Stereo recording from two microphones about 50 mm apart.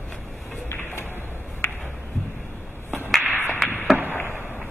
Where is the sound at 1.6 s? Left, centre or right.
Left.